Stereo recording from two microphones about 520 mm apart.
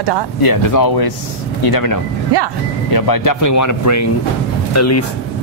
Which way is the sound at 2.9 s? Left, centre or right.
Left.